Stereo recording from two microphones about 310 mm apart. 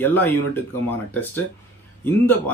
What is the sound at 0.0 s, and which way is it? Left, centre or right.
Speech, centre.